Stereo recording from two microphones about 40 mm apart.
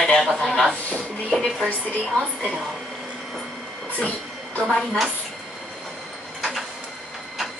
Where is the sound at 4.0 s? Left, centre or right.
Left.